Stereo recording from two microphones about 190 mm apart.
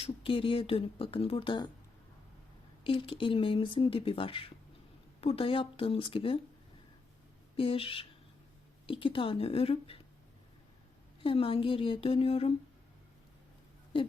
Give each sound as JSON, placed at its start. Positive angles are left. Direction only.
{"t": 0.0, "sound": "speech", "side_deg": 30}
{"t": 2.8, "sound": "speech", "side_deg": 30}
{"t": 7.5, "sound": "speech", "side_deg": 30}
{"t": 11.2, "sound": "speech", "side_deg": 30}